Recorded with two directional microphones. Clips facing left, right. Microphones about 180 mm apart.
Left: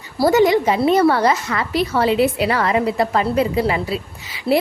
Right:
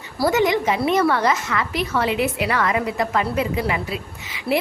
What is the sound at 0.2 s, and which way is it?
A woman's voice, 35° left (ahead or behind).